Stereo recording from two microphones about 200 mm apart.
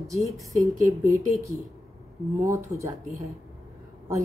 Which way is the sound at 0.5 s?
15° right (ahead or behind).